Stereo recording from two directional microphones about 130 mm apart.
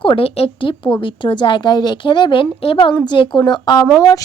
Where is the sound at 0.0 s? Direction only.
45° left (ahead or behind).